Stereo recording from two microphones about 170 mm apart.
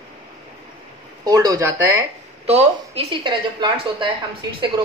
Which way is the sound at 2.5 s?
35° right (ahead or behind).